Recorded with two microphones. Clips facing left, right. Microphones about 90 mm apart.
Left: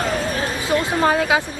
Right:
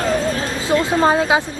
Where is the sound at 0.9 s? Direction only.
20° right (ahead or behind).